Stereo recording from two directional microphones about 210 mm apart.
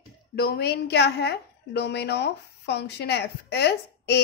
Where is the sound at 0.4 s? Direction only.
50° left (ahead or behind).